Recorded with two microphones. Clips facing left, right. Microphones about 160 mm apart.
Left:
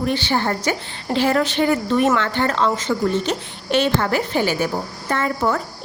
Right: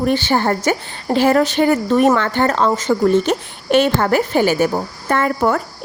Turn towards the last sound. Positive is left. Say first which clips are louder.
# right 4 dB
turn(degrees=-55)  # may be behind; listen again after turning